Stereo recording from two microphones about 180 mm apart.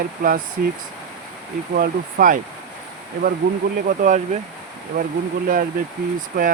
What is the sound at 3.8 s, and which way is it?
Speech, 45° right (ahead or behind).